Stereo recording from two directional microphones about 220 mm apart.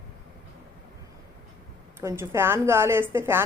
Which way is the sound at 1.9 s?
10° right (ahead or behind).